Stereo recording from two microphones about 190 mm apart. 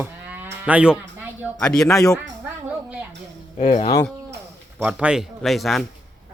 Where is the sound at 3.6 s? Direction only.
35° left (ahead or behind).